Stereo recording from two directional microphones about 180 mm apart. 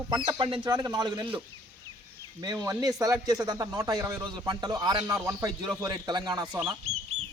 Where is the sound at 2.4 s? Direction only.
20° right (ahead or behind).